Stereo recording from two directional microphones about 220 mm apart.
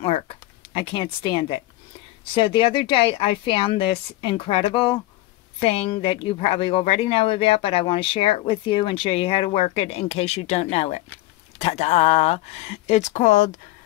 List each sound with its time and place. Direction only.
0.7 s speech: 25° left (ahead or behind)